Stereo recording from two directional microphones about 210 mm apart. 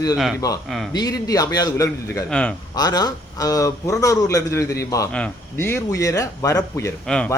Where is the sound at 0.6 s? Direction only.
Centre (ahead or behind).